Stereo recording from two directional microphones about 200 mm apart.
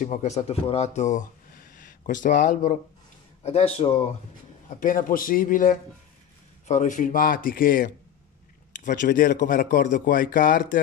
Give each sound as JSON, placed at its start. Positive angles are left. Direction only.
{"t": 0.0, "sound": "speech", "side_deg": 35}
{"t": 3.5, "sound": "speech", "side_deg": 30}
{"t": 4.7, "sound": "a man's voice", "side_deg": 40}